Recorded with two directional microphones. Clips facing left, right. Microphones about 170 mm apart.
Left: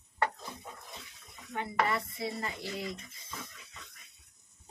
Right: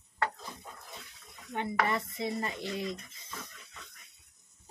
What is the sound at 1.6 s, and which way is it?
Speech, 20° right (ahead or behind).